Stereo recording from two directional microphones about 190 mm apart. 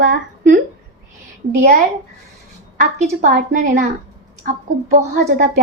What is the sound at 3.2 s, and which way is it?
A woman's voice, 50° right (ahead or behind).